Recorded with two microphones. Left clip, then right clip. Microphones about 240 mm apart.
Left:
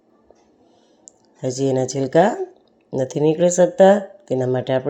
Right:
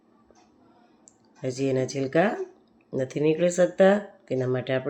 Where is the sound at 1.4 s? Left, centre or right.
Centre.